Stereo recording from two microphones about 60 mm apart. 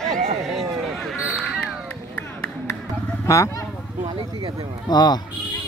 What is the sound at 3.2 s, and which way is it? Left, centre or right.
Speech, left.